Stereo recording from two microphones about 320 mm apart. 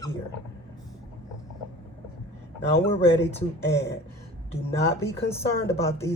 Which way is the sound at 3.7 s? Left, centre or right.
Centre.